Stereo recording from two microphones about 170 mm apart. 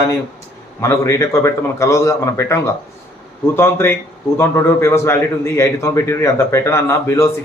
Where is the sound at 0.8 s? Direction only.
20° left (ahead or behind).